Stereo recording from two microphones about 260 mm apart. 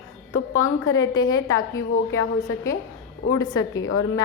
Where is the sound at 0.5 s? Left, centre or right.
Centre.